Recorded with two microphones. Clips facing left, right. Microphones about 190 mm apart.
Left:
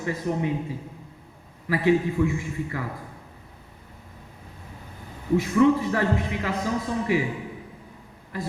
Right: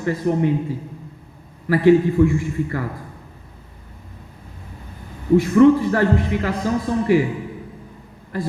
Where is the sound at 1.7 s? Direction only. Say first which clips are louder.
Right 7 dB; 55° right (ahead or behind).